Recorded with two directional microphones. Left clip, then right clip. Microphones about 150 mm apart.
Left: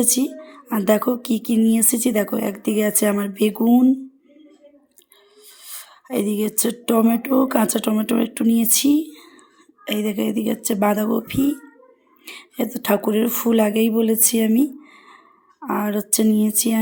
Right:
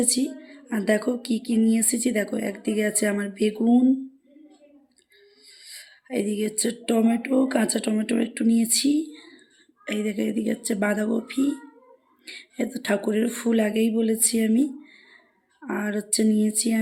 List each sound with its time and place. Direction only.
0.0 s a woman's voice: 25° left (ahead or behind)
3.6 s speech: 15° left (ahead or behind)
5.5 s a sound: 25° left (ahead or behind)
9.8 s a woman's voice: 20° left (ahead or behind)
14.9 s a sound: 15° left (ahead or behind)
15.6 s a woman's voice: 20° left (ahead or behind)